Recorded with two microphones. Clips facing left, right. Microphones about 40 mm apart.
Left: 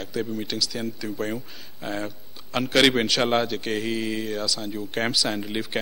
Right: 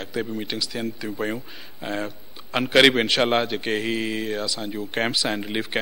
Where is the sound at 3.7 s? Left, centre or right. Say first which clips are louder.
Right 1 dB; centre.